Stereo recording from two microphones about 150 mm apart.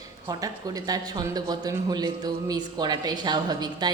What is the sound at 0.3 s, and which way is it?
A woman's voice, 25° right (ahead or behind).